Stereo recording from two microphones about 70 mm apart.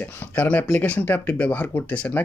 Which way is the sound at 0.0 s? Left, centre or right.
Left.